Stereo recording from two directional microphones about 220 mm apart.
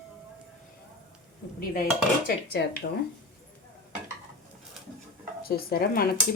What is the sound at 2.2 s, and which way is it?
Speech, 50° left (ahead or behind).